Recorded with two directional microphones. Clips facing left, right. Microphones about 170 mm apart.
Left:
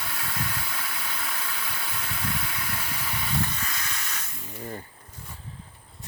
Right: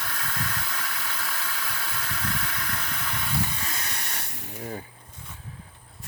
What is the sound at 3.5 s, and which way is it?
Hiss, 20° right (ahead or behind).